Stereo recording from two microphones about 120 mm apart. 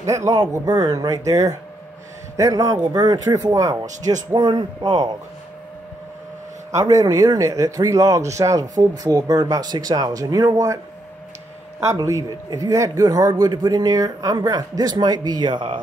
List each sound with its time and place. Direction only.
0.0 s a man's voice: 25° right (ahead or behind)
4.3 s a man's voice: 40° right (ahead or behind)
6.9 s speech: 30° right (ahead or behind)
12.0 s a man's voice: 30° right (ahead or behind)